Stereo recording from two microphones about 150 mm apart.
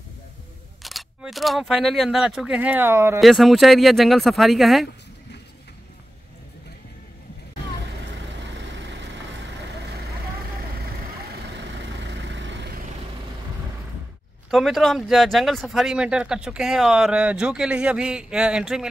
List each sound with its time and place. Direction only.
0.8 s speech: centre (ahead or behind); by 3.2 s 15° right (ahead or behind)
3.2 s speech: centre (ahead or behind)
14.5 s speech: centre (ahead or behind)